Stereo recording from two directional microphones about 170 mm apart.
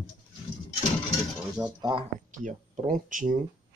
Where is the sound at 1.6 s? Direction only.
25° right (ahead or behind).